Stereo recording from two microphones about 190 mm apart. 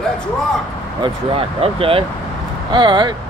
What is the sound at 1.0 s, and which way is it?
Speech, 30° right (ahead or behind).